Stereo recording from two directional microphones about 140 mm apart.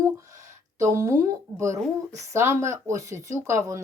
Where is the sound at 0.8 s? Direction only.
20° right (ahead or behind).